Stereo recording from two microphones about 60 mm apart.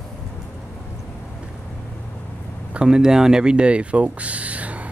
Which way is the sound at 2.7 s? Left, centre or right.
Centre.